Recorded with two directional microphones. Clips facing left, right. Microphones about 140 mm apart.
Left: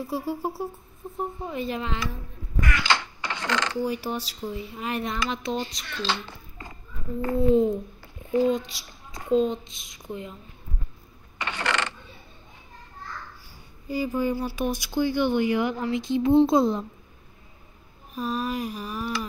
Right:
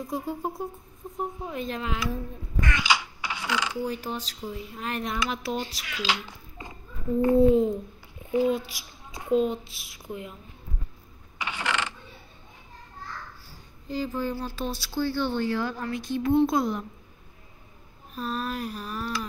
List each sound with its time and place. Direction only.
0.0 s speech: 5° left (ahead or behind)
2.8 s coin: 10° right (ahead or behind)
3.8 s speech: 10° left (ahead or behind)
5.1 s a child's voice: 5° right (ahead or behind); by 7.4 s 20° right (ahead or behind)
8.3 s a child's voice: 5° right (ahead or behind)
11.3 s a sound: 10° right (ahead or behind)
13.5 s speech: 10° left (ahead or behind)
18.1 s speech: 10° left (ahead or behind)